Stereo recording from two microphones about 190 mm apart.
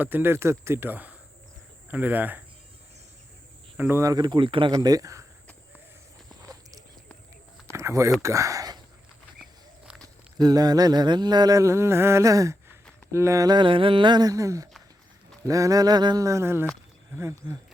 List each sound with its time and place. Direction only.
0.0 s a sound: 10° right (ahead or behind)
3.8 s mantra: 10° right (ahead or behind)
7.7 s speech: 15° right (ahead or behind)
9.8 s walk: 5° right (ahead or behind)
10.3 s mantra: 20° right (ahead or behind)
15.4 s a sound: 15° right (ahead or behind)